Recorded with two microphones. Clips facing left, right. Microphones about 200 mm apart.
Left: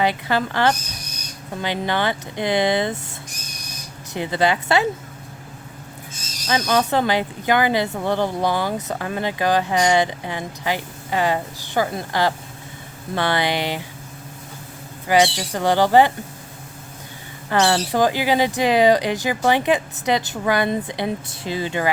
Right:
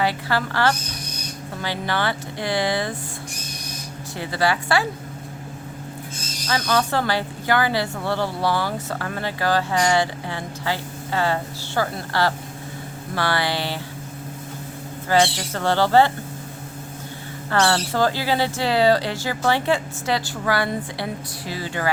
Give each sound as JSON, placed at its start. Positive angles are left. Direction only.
{"t": 0.0, "sound": "speech", "side_deg": 20}
{"t": 4.1, "sound": "speech", "side_deg": 20}
{"t": 6.5, "sound": "speech", "side_deg": 20}
{"t": 15.0, "sound": "speech", "side_deg": 15}
{"t": 17.5, "sound": "speech", "side_deg": 15}